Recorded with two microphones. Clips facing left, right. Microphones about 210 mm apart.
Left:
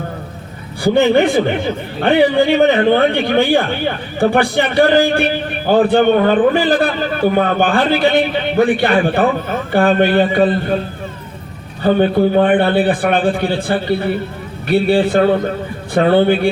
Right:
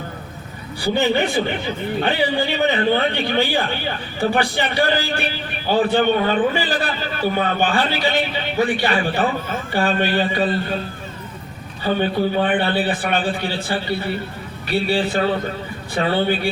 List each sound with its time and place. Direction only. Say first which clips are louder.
0.9 s a man's voice: left 7 dB; 55° left (ahead or behind)
11.8 s a man's voice: left 7 dB; 50° left (ahead or behind)